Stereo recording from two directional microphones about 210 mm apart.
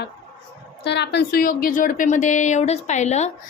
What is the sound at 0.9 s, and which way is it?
A woman's voice, 55° left (ahead or behind).